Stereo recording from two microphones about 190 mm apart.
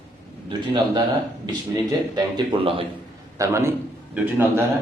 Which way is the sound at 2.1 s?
25° right (ahead or behind).